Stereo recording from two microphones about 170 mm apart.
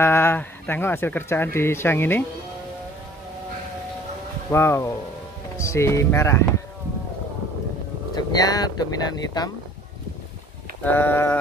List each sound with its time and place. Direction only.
0.0 s speech: 15° left (ahead or behind)
4.5 s speech: 15° left (ahead or behind)
8.1 s speech: 25° left (ahead or behind)
10.8 s speech: 10° left (ahead or behind)